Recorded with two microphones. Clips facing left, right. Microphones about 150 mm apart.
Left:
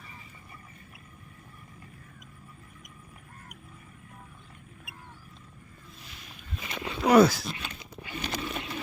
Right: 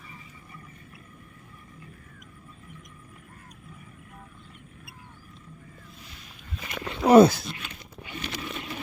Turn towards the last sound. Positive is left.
turn(degrees=-25)  # may be behind; listen again after turning